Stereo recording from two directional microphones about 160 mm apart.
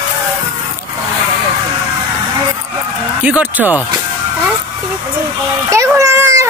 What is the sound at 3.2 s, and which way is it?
Speech, 10° right (ahead or behind).